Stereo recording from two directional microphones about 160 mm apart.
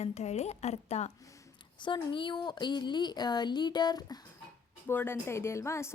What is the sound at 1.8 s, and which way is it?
Speech, 30° left (ahead or behind).